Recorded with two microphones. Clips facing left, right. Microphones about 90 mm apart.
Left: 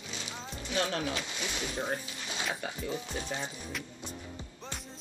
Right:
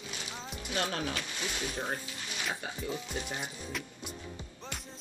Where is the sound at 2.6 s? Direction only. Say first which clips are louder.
Left 1 dB; 20° right (ahead or behind).